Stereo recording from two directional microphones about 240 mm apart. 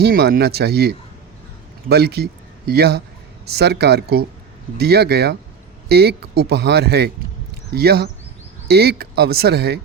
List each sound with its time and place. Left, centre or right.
0.0 s speech: right